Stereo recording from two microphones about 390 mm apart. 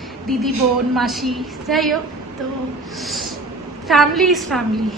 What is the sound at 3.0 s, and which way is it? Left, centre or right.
Snort, centre.